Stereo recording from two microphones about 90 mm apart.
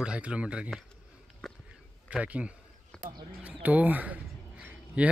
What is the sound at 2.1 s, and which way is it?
A man's voice, 15° right (ahead or behind).